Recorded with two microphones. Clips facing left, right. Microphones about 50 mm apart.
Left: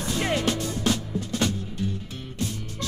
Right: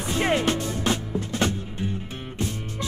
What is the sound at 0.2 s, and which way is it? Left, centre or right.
Music, right.